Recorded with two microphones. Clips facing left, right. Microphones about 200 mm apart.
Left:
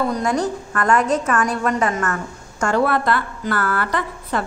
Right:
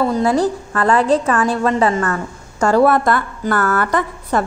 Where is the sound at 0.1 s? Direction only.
30° right (ahead or behind).